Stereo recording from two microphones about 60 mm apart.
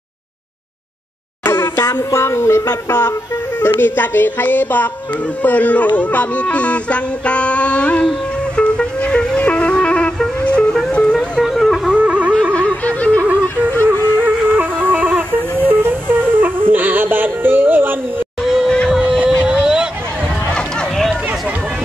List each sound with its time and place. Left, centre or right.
1.4 s a sound: left
2.9 s speech: left
6.5 s music: left
11.4 s music: centre
11.9 s music: centre
12.5 s a sound: left
13.4 s music: left
13.8 s music: right
18.4 s music: centre
18.9 s a sound: centre
20.5 s run: centre